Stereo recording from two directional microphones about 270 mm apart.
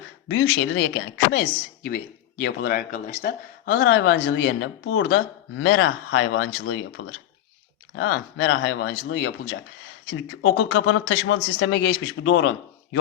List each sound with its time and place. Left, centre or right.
0.3 s a man's voice: left